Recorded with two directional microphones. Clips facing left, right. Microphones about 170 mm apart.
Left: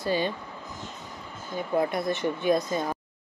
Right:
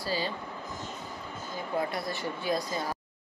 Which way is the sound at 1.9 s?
20° left (ahead or behind).